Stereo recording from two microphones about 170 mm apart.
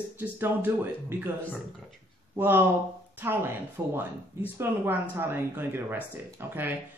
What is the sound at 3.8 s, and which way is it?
Speech, 15° right (ahead or behind).